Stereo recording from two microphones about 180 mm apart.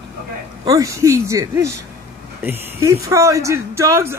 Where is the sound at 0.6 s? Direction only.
20° right (ahead or behind).